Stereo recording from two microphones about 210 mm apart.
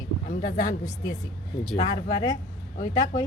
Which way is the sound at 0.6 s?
20° left (ahead or behind).